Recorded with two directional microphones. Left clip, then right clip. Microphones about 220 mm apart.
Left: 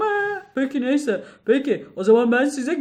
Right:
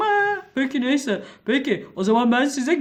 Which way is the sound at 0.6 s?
45° right (ahead or behind).